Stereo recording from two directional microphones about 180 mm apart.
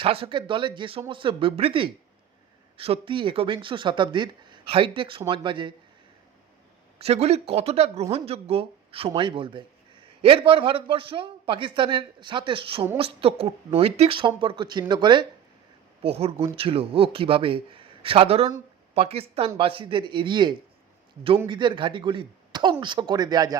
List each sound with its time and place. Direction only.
0.0 s a man's voice: 30° right (ahead or behind)
7.0 s a man's voice: 35° right (ahead or behind)